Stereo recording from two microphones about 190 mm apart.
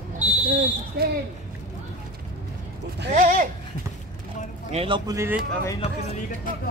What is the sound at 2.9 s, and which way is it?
Speech, 55° right (ahead or behind).